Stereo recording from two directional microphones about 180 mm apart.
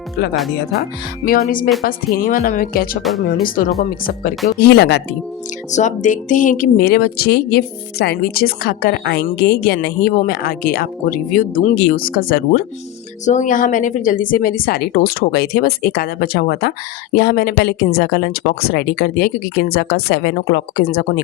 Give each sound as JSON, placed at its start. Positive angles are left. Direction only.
{"t": 1.2, "sound": "speech", "side_deg": 50}
{"t": 3.0, "sound": "speech", "side_deg": 0}
{"t": 4.0, "sound": "speech", "side_deg": 50}
{"t": 4.6, "sound": "a woman's voice", "side_deg": 65}
{"t": 5.7, "sound": "a woman's voice", "side_deg": 45}
{"t": 13.2, "sound": "a woman's voice", "side_deg": 45}